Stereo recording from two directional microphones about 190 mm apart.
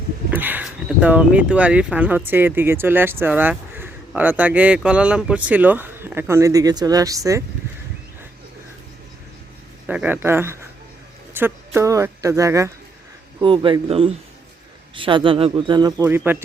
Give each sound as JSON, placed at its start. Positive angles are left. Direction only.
{"t": 0.3, "sound": "speech", "side_deg": -10}
{"t": 9.8, "sound": "speech", "side_deg": -5}
{"t": 13.4, "sound": "speech", "side_deg": -25}
{"t": 16.0, "sound": "speech", "side_deg": -10}